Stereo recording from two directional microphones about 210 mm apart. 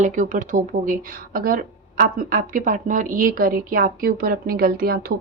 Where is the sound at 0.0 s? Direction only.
35° right (ahead or behind).